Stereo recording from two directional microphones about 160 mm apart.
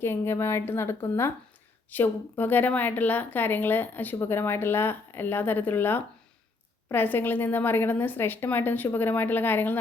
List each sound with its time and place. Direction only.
0.0 s a woman's voice: 15° left (ahead or behind)